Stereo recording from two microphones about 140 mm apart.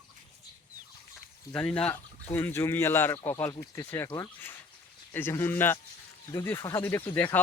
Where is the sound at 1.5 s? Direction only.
10° left (ahead or behind).